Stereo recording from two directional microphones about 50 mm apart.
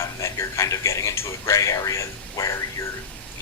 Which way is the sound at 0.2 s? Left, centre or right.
Left.